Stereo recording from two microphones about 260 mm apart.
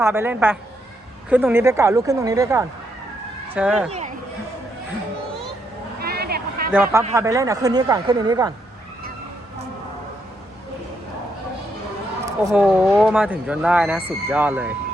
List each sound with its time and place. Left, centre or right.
0.0 s speech: centre
6.0 s a sound: right
6.7 s speech: centre
12.5 s speech: centre